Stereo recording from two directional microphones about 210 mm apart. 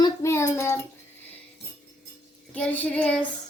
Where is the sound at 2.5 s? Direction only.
5° left (ahead or behind).